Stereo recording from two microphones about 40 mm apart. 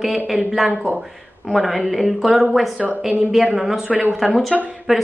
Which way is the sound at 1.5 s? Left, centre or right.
Centre.